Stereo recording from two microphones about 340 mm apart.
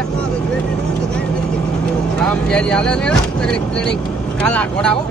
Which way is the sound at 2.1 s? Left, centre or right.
Centre.